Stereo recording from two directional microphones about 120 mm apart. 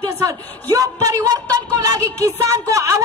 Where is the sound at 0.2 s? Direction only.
30° right (ahead or behind).